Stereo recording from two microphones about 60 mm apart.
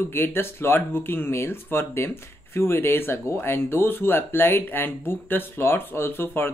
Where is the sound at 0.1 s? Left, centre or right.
Left.